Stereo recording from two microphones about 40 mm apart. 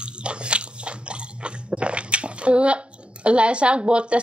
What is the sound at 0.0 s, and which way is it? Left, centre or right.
Biting, right.